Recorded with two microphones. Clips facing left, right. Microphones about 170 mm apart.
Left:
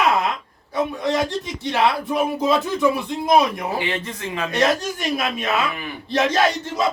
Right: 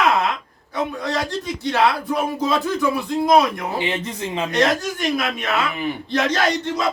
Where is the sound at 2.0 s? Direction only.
20° left (ahead or behind).